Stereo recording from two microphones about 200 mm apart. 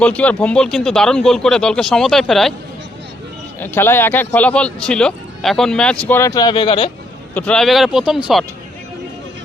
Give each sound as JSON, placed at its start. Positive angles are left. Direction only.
{"t": 0.0, "sound": "speech", "side_deg": 5}
{"t": 3.6, "sound": "speech", "side_deg": 10}
{"t": 7.3, "sound": "speech", "side_deg": 5}